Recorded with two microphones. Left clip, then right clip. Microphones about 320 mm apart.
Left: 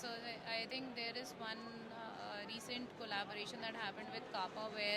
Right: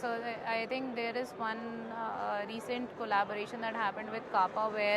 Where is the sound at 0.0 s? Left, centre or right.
Centre.